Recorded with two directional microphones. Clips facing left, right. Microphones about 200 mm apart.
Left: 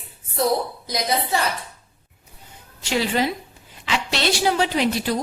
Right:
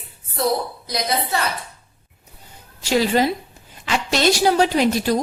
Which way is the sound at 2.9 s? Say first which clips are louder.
Right 4 dB; 40° right (ahead or behind).